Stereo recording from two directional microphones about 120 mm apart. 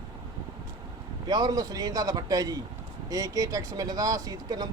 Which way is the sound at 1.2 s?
35° right (ahead or behind).